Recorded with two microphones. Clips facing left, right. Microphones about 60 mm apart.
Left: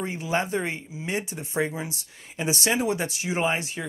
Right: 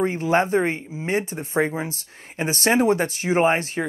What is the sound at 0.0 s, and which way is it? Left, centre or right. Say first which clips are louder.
Speech: right 7 dB; right.